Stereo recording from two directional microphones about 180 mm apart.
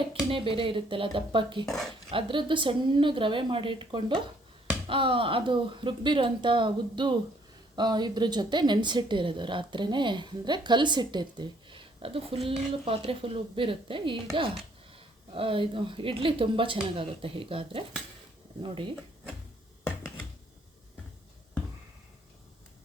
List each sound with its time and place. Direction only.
0.0 s a woman's voice: 30° right (ahead or behind)
1.6 s speech: centre (ahead or behind)
2.0 s a woman's voice: 30° right (ahead or behind)